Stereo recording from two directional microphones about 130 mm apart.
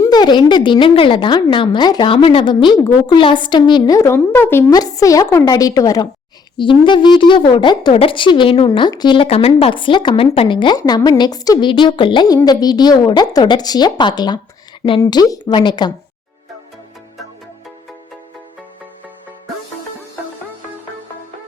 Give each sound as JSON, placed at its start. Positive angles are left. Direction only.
{"t": 0.0, "sound": "a woman's voice", "side_deg": 30}
{"t": 2.8, "sound": "a woman's voice", "side_deg": 25}
{"t": 3.2, "sound": "a woman's voice", "side_deg": 40}
{"t": 4.7, "sound": "a woman's voice", "side_deg": 30}
{"t": 6.6, "sound": "a woman's voice", "side_deg": 40}